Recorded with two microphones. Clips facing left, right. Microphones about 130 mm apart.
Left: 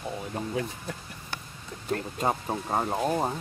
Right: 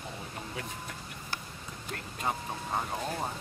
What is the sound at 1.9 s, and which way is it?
Speech, 45° left (ahead or behind).